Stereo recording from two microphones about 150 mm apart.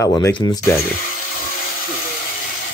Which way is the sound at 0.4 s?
25° left (ahead or behind).